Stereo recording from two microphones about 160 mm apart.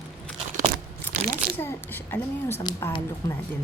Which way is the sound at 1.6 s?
15° left (ahead or behind).